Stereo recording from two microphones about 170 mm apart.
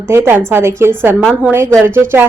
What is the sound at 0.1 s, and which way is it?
Speech, 10° right (ahead or behind).